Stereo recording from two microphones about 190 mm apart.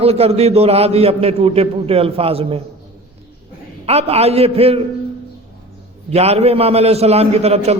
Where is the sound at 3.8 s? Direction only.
35° right (ahead or behind).